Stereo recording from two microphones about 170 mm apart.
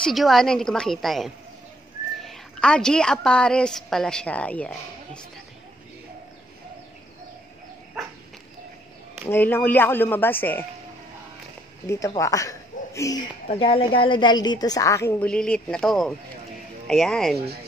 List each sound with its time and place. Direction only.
0.0 s a woman's voice: centre (ahead or behind)
9.3 s speech: 10° left (ahead or behind)
11.9 s speech: 20° left (ahead or behind)
13.5 s a woman's voice: 35° left (ahead or behind); by 17.4 s centre (ahead or behind)